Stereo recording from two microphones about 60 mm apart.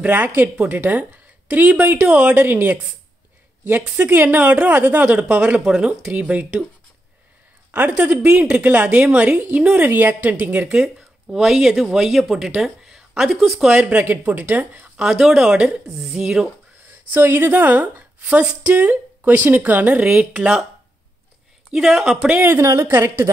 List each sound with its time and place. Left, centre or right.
0.0 s a woman's voice: right
2.3 s a woman's voice: right
5.7 s a woman's voice: centre
7.7 s a woman's voice: right; by 13.7 s centre
13.7 s a woman's voice: right
15.1 s a woman's voice: centre
17.1 s a woman's voice: right
21.7 s a woman's voice: centre
22.3 s a woman's voice: right
22.6 s a woman's voice: right